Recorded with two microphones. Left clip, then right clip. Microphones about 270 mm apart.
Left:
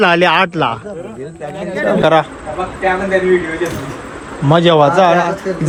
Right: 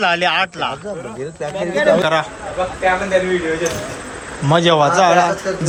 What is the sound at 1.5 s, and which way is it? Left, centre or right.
Speech, right.